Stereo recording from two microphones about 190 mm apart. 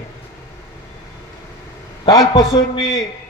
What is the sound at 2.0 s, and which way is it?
Speech, 20° left (ahead or behind).